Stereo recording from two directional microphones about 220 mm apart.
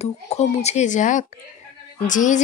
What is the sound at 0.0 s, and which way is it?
Speech, 30° left (ahead or behind).